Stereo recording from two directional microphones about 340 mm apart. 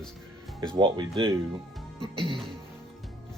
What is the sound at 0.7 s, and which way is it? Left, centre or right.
Speech, centre.